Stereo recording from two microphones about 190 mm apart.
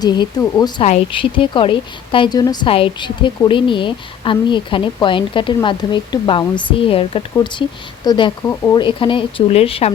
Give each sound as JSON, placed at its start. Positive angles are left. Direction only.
{"t": 0.0, "sound": "speech", "side_deg": 20}
{"t": 0.8, "sound": "speech", "side_deg": 30}
{"t": 8.8, "sound": "speech", "side_deg": 25}